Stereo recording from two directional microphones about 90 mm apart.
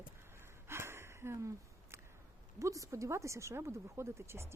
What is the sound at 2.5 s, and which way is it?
Speech, 35° right (ahead or behind).